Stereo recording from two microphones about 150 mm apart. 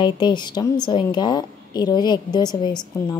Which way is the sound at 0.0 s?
30° left (ahead or behind).